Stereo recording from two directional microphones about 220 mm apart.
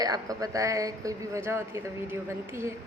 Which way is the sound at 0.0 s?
15° right (ahead or behind).